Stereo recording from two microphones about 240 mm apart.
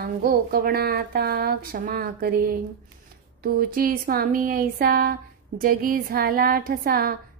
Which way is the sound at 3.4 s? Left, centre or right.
Right.